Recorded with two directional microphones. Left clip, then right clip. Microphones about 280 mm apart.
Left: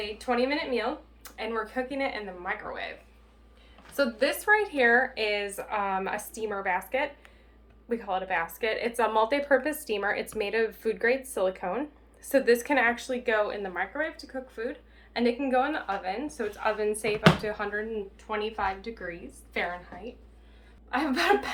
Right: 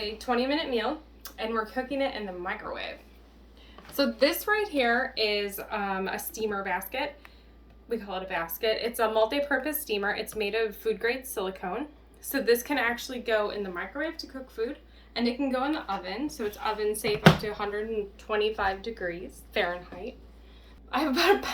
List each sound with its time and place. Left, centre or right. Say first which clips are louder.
0.4 s speech: even; centre
3.9 s speech: right 1 dB; centre
20.9 s speech: right 1 dB; centre